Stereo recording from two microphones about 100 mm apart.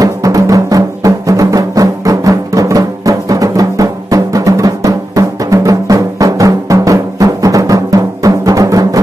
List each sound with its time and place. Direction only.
0.0 s music: 35° right (ahead or behind)